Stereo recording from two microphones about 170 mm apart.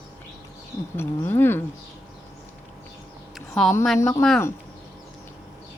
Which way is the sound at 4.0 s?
15° left (ahead or behind).